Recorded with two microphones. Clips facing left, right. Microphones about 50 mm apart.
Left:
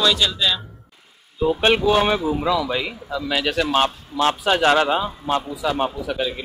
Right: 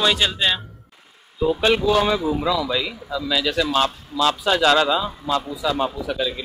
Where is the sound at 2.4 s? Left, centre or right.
Left.